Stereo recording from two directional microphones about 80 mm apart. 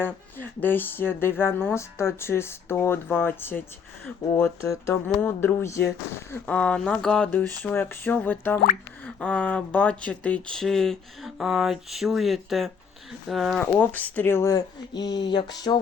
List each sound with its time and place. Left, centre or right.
0.0 s speech: left
4.4 s speech: left
5.0 s speech: left
5.5 s speech: left
6.4 s speech: centre
7.3 s speech: left; by 11.3 s centre
11.3 s speech: centre
13.6 s speech: centre
14.5 s speech: left